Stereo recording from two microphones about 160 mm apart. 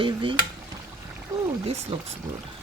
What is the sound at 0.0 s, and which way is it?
Speech, 30° right (ahead or behind).